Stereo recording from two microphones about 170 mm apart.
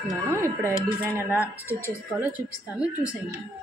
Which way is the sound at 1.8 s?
20° left (ahead or behind).